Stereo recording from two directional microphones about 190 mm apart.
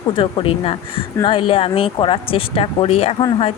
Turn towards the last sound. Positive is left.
turn(degrees=30)  # may be behind; listen again after turning